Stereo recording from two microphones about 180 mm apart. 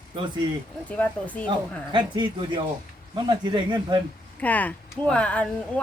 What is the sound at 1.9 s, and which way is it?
Speech, 25° right (ahead or behind).